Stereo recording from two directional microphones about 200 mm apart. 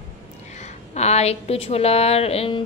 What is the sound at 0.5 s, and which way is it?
Speech, 35° left (ahead or behind).